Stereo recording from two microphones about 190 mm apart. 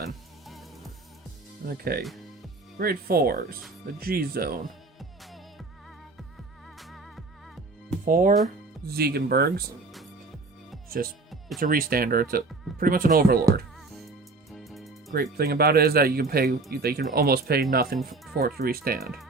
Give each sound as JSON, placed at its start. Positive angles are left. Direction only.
{"t": 1.6, "sound": "speech", "side_deg": -55}
{"t": 4.9, "sound": "music", "side_deg": 0}
{"t": 6.7, "sound": "music", "side_deg": 0}
{"t": 8.0, "sound": "speech", "side_deg": -45}
{"t": 8.9, "sound": "speech", "side_deg": -55}
{"t": 10.8, "sound": "music", "side_deg": -50}
{"t": 11.3, "sound": "music", "side_deg": 0}
{"t": 11.6, "sound": "speech", "side_deg": -50}
{"t": 14.5, "sound": "music", "side_deg": 0}
{"t": 15.1, "sound": "speech", "side_deg": -50}